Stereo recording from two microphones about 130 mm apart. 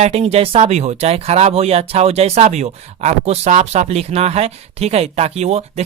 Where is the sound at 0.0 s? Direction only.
55° right (ahead or behind).